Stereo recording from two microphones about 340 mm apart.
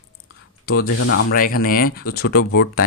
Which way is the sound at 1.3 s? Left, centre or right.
Left.